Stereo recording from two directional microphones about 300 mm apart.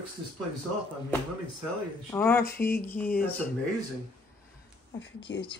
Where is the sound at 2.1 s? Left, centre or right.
Centre.